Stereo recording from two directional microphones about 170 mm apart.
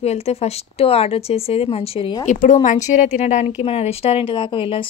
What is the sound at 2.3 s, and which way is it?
Speech, 50° left (ahead or behind).